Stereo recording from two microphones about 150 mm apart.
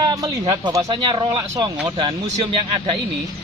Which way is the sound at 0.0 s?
25° right (ahead or behind).